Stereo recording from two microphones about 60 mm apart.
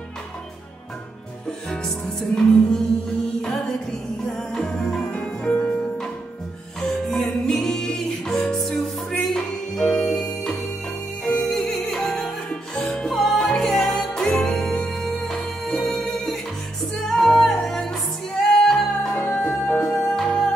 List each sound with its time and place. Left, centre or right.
1.7 s music: centre
4.3 s music: centre
5.1 s music: centre
6.8 s music: centre
19.1 s music: left